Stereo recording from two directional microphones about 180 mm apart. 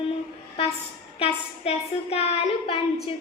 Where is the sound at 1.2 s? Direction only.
35° left (ahead or behind).